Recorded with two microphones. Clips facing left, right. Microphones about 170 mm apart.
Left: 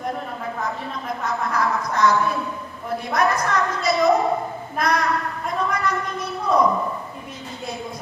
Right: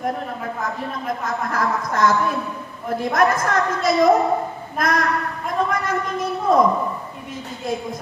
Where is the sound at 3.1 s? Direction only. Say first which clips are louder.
Right 2 dB; 50° right (ahead or behind).